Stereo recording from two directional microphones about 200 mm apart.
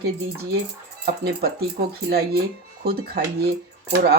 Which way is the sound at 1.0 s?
50° right (ahead or behind).